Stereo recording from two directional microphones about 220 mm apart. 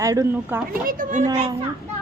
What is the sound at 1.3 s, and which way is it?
Speech, 25° right (ahead or behind).